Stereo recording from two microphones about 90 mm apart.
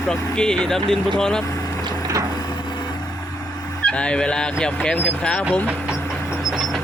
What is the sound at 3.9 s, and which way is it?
Speech, 10° left (ahead or behind).